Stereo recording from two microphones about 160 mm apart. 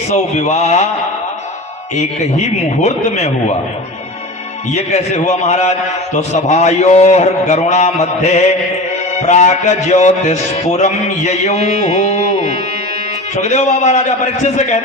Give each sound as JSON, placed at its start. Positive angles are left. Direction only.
{"t": 0.1, "sound": "music", "side_deg": 45}
{"t": 2.8, "sound": "speech", "side_deg": 40}
{"t": 4.7, "sound": "music", "side_deg": 45}